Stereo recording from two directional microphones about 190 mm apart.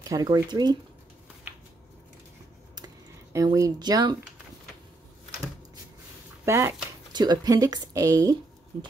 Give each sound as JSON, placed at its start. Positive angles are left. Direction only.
{"t": 0.0, "sound": "speech", "side_deg": -20}
{"t": 3.3, "sound": "speech", "side_deg": -15}
{"t": 6.4, "sound": "speech", "side_deg": -15}